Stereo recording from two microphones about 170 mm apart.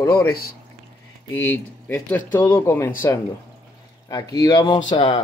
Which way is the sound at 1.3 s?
15° left (ahead or behind).